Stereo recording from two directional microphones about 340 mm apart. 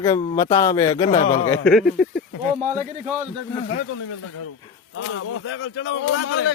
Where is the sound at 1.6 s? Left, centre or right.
Centre.